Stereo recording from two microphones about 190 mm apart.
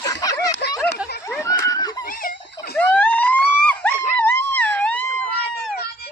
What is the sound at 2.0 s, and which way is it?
Giggle, 45° left (ahead or behind).